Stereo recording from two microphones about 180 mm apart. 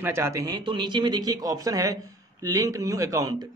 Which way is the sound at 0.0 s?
15° right (ahead or behind).